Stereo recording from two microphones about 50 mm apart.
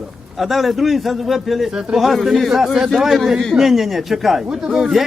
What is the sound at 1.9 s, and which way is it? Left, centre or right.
Speech, centre.